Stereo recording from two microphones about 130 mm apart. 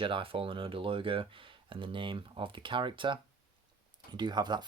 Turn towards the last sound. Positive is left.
turn(degrees=-35)  # may be behind; listen again after turning